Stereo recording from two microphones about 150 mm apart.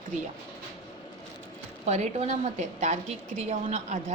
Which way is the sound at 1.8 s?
50° right (ahead or behind).